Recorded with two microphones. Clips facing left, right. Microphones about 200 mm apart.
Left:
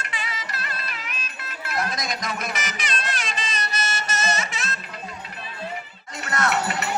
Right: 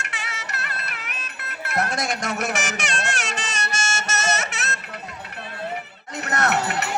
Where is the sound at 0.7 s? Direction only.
70° right (ahead or behind).